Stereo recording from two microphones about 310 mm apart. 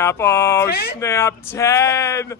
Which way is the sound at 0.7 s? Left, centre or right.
Left.